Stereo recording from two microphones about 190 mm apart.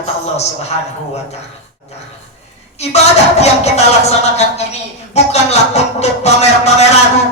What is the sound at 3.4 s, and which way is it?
Speech, 35° left (ahead or behind).